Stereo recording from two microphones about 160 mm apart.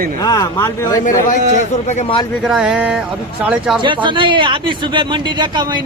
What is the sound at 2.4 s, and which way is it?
Speech, centre (ahead or behind).